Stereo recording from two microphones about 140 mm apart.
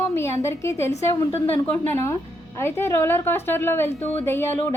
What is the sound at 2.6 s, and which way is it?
A woman's voice, 20° left (ahead or behind).